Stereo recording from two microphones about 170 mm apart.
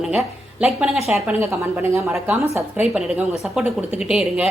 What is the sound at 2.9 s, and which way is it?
Speech, 5° right (ahead or behind).